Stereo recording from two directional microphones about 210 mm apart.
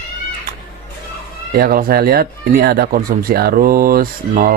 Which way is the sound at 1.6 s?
45° right (ahead or behind).